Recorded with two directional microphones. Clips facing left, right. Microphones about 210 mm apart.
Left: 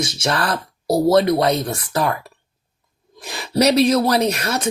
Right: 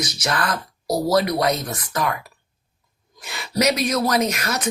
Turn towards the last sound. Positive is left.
turn(degrees=30)  # may be behind; listen again after turning